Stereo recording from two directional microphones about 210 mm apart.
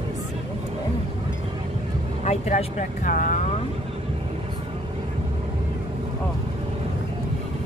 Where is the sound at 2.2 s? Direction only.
35° left (ahead or behind).